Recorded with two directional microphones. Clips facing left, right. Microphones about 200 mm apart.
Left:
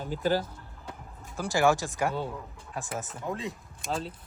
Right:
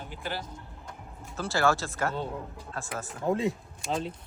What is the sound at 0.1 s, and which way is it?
Speech, 40° left (ahead or behind).